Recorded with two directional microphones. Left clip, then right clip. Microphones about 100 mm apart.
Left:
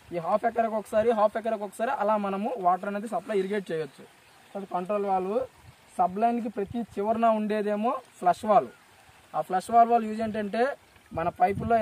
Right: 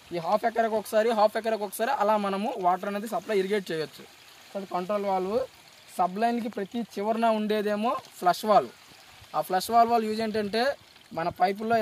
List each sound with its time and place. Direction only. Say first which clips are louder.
0.4 s speech: right 1 dB; 20° right (ahead or behind); by 11.8 s 10° left (ahead or behind)